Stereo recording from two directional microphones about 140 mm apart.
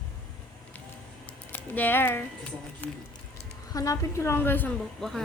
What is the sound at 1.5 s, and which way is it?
Speech, 10° left (ahead or behind).